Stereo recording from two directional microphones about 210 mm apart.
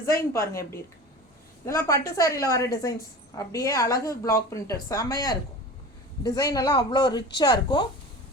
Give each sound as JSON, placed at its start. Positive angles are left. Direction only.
{"t": 0.0, "sound": "a woman's voice", "side_deg": 15}